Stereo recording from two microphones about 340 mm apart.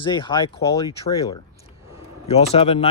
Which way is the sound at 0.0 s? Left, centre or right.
Centre.